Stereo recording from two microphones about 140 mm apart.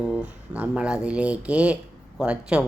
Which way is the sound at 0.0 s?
5° right (ahead or behind).